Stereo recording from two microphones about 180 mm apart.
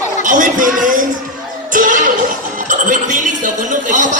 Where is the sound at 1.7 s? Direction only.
45° right (ahead or behind).